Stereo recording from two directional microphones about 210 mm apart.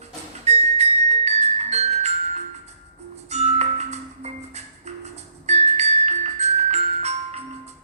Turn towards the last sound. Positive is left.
turn(degrees=-30)  # may be behind; listen again after turning